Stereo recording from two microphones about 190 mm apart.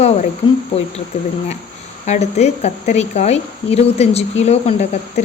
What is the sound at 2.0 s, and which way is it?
A woman's voice, 35° left (ahead or behind).